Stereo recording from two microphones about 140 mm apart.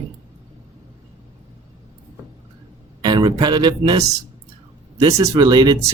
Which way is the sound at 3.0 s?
30° right (ahead or behind).